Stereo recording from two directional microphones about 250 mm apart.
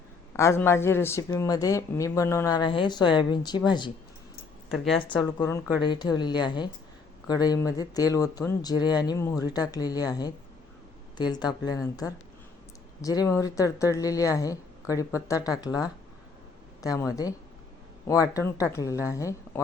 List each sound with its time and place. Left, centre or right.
0.3 s speech: centre
5.1 s speech: centre